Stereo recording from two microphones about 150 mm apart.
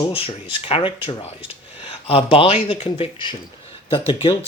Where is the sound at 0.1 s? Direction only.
40° left (ahead or behind).